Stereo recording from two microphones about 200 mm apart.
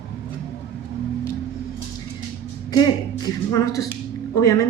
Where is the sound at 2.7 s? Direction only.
20° left (ahead or behind).